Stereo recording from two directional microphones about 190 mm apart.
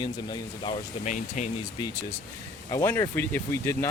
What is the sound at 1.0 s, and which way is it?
Speech, 40° left (ahead or behind).